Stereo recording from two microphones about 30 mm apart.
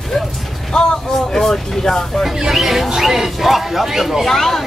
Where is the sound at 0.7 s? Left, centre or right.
Centre.